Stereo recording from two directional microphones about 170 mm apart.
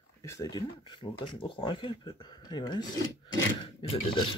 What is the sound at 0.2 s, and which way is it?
Speech, 20° left (ahead or behind).